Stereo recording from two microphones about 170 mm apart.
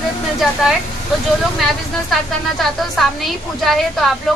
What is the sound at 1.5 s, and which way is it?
A woman's voice, centre (ahead or behind).